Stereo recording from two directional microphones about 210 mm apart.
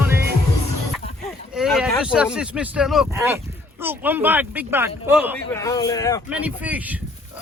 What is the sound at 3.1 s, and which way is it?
Speech, 15° right (ahead or behind).